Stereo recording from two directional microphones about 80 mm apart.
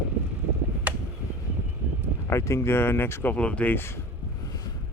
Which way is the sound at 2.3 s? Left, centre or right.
Left.